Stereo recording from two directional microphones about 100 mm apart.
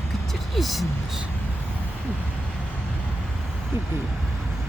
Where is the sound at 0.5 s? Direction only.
Centre (ahead or behind).